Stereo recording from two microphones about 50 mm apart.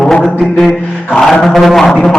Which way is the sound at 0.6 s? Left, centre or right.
Centre.